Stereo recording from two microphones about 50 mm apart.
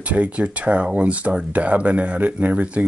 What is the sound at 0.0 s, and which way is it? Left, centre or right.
Speech, right.